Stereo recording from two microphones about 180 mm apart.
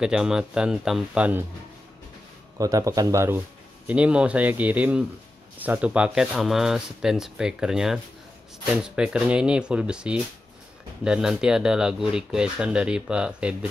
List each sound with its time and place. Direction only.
0.0 s speech: 5° right (ahead or behind)
2.6 s speech: 20° right (ahead or behind)